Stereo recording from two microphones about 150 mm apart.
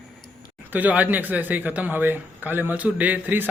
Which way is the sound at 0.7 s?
10° right (ahead or behind).